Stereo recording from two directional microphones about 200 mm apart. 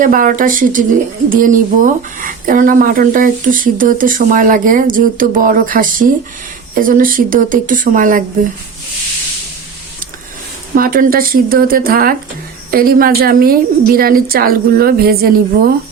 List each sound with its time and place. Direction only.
0.0 s speech: 40° right (ahead or behind)
10.8 s speech: 45° right (ahead or behind)